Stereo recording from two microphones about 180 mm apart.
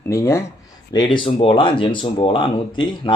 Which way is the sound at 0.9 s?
25° left (ahead or behind).